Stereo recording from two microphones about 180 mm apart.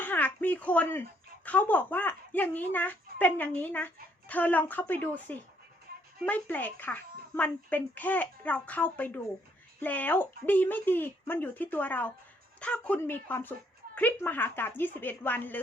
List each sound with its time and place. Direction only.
0.0 s a sound: 10° left (ahead or behind)
1.5 s a woman's voice: 10° left (ahead or behind)
5.9 s music: 60° right (ahead or behind)
6.2 s a woman's voice: 10° left (ahead or behind)